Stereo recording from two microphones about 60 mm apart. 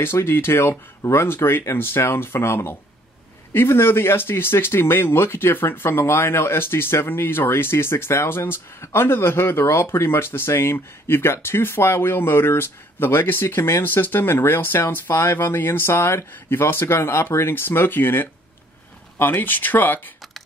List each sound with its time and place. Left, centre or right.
0.0 s speech: left